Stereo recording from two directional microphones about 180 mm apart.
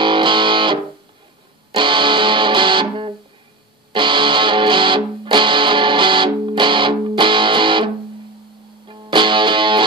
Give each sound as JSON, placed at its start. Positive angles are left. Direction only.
{"t": 0.0, "sound": "music", "side_deg": -25}